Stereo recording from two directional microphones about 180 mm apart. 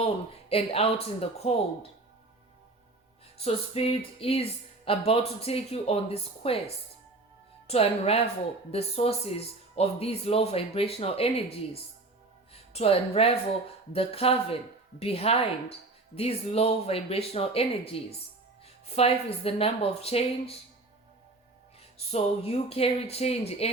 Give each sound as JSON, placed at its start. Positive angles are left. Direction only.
{"t": 0.0, "sound": "music", "side_deg": 35}
{"t": 3.3, "sound": "music", "side_deg": 35}
{"t": 7.7, "sound": "music", "side_deg": 35}
{"t": 12.7, "sound": "music", "side_deg": 35}
{"t": 21.9, "sound": "music", "side_deg": 35}